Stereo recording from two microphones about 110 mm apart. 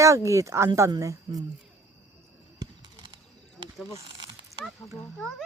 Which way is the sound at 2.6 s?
45° right (ahead or behind).